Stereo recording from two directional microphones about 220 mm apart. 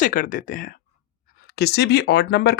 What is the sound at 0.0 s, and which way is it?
Speech, 40° left (ahead or behind).